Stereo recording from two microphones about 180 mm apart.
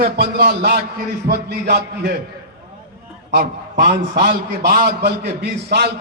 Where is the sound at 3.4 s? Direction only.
65° right (ahead or behind).